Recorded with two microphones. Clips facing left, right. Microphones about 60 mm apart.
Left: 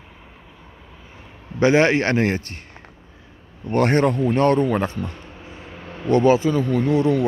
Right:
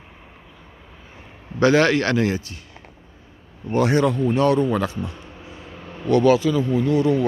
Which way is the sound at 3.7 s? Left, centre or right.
Left.